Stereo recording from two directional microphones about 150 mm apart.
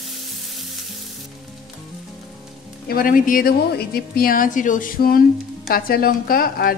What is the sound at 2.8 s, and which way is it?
A woman's voice, 75° left (ahead or behind).